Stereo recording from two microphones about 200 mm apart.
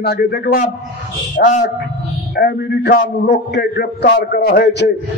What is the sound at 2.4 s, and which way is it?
A man's voice, 55° left (ahead or behind).